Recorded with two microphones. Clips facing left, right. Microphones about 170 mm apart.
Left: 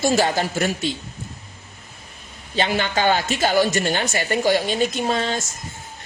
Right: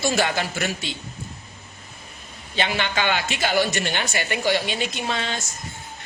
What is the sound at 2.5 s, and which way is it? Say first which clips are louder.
A man's voice: left 3 dB; 40° left (ahead or behind).